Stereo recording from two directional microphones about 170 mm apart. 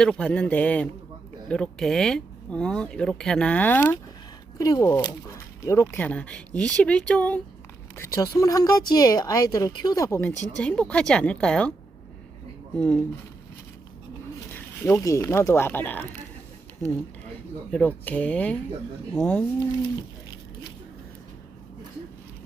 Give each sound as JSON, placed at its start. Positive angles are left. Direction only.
{"t": 0.0, "sound": "speech", "side_deg": 5}
{"t": 12.7, "sound": "speech", "side_deg": 5}
{"t": 14.5, "sound": "speech", "side_deg": 15}
{"t": 17.7, "sound": "speech", "side_deg": 10}